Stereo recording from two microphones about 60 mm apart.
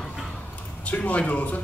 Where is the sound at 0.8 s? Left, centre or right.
Left.